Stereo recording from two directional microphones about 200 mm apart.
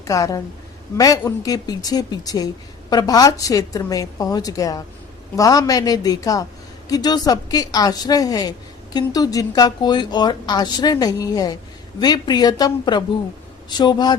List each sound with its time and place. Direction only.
0.0 s a woman's voice: 15° left (ahead or behind)